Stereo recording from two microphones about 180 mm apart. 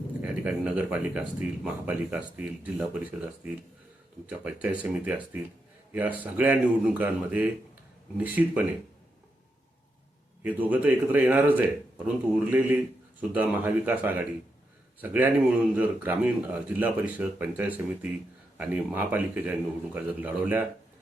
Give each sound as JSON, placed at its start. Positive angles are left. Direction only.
{"t": 0.2, "sound": "speech", "side_deg": -10}
{"t": 10.4, "sound": "speech", "side_deg": -10}